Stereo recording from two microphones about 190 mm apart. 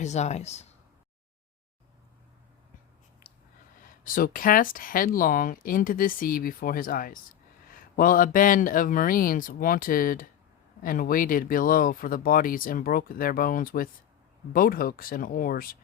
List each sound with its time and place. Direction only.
0.0 s speech: 35° left (ahead or behind)
4.0 s speech: 45° left (ahead or behind)